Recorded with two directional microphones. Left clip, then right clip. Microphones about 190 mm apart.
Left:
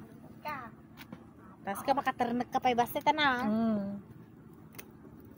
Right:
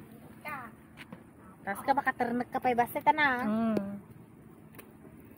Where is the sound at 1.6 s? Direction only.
15° left (ahead or behind).